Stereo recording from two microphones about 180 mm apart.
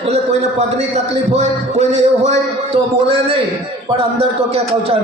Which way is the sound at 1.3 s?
35° right (ahead or behind).